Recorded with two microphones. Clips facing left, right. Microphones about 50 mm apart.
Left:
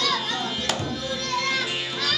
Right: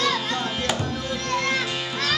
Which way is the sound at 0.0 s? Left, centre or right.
Centre.